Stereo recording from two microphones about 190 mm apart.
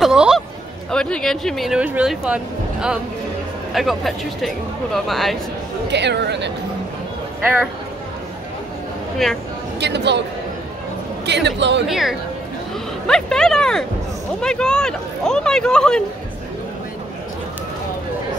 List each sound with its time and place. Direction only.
0.0 s hubbub: 5° right (ahead or behind)
0.9 s speech: 5° left (ahead or behind)
5.9 s speech: 65° right (ahead or behind)
9.2 s speech: centre (ahead or behind)
9.8 s speech: 65° right (ahead or behind)
11.2 s speech: 65° right (ahead or behind)
11.9 s speech: centre (ahead or behind)